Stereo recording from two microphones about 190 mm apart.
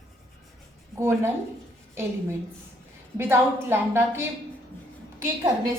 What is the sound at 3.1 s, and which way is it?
A woman's voice, 10° right (ahead or behind).